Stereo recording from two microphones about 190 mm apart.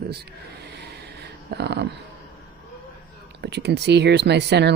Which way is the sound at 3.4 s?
60° right (ahead or behind).